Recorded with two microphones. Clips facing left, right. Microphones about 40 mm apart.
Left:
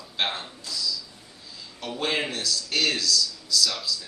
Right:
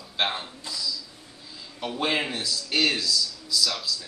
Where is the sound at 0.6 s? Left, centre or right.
Centre.